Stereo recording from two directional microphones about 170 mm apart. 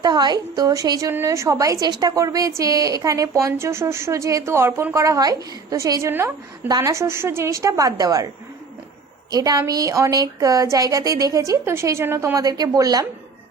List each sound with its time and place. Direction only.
0.0 s a woman's voice: 25° right (ahead or behind)
9.3 s speech: 20° right (ahead or behind)